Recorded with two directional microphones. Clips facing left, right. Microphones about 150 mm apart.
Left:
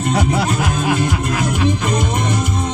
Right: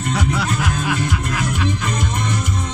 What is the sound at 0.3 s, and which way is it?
Speech, 40° left (ahead or behind).